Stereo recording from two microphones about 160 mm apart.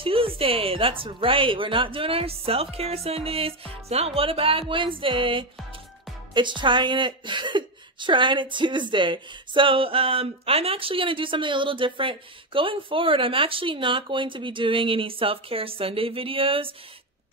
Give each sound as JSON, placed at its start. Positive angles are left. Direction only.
{"t": 0.0, "sound": "a woman's voice", "side_deg": -35}